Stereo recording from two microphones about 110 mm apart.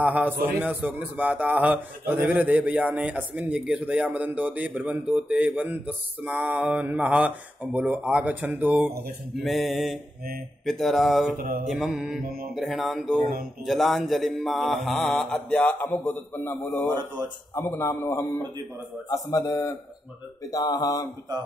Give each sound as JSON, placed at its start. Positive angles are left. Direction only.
{"t": 0.0, "sound": "a man's voice", "side_deg": -15}
{"t": 8.8, "sound": "mantra", "side_deg": 0}
{"t": 17.6, "sound": "a man's voice", "side_deg": 25}